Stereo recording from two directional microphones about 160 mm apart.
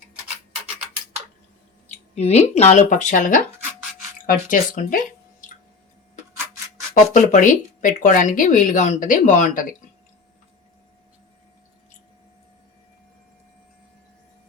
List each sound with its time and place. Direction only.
2.1 s speech: 40° left (ahead or behind); by 5.5 s 60° left (ahead or behind)
6.3 s a sound: 20° right (ahead or behind)
6.9 s speech: 55° left (ahead or behind)